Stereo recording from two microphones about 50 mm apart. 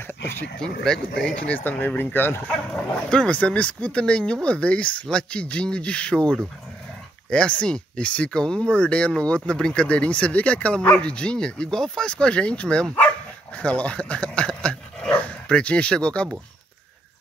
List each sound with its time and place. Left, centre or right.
0.6 s speech: centre
1.6 s speech: left
2.4 s speech: left